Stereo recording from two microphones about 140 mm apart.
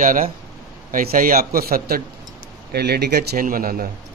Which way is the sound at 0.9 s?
85° right.